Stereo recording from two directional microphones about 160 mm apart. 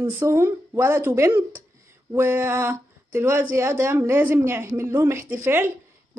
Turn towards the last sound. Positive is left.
turn(degrees=-15)  # may be behind; listen again after turning